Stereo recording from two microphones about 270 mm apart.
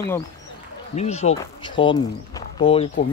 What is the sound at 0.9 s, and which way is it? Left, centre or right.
Speech, left.